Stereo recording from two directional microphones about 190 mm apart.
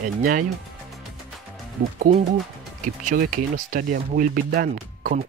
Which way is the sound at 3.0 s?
45° right (ahead or behind).